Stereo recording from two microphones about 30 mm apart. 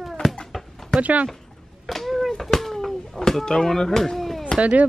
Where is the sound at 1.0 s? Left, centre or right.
Right.